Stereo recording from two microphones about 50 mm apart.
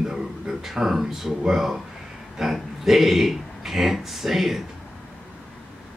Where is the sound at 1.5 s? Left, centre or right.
Centre.